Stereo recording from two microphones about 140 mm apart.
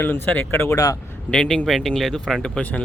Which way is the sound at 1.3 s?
5° left (ahead or behind).